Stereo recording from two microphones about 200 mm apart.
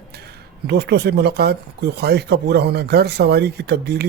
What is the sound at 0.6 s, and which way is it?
Speech, 55° right (ahead or behind).